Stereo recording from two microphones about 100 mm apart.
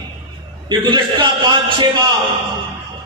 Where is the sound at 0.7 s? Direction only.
50° right (ahead or behind).